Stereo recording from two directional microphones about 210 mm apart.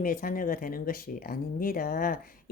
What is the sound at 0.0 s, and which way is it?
Speech, 40° left (ahead or behind).